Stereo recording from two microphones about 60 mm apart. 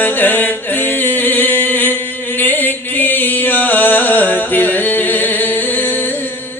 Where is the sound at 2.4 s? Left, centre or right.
Left.